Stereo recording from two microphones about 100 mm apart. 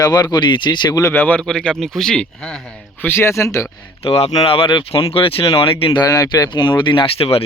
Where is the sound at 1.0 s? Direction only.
20° left (ahead or behind).